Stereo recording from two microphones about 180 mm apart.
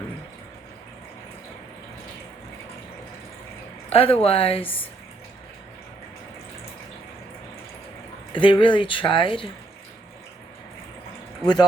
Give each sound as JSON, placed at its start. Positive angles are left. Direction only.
{"t": 3.9, "sound": "speech", "side_deg": 30}
{"t": 8.3, "sound": "speech", "side_deg": 25}